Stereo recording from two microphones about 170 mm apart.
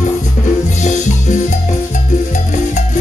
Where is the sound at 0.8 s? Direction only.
45° left (ahead or behind).